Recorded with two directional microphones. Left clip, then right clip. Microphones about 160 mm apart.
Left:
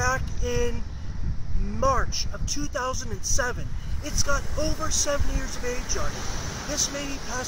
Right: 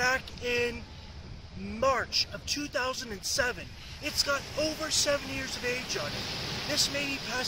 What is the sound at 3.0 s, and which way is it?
Speech, 25° right (ahead or behind).